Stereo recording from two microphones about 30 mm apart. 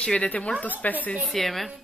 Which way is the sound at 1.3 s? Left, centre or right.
Centre.